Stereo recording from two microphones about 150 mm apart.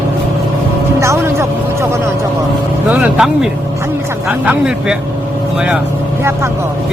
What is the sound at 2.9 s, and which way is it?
Speech, 5° right (ahead or behind).